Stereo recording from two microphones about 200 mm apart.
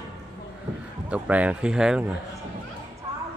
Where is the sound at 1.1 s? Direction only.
5° right (ahead or behind).